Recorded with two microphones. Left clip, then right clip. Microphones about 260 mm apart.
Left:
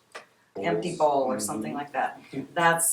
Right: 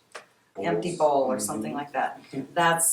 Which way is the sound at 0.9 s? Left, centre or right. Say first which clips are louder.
Right 1 dB; centre.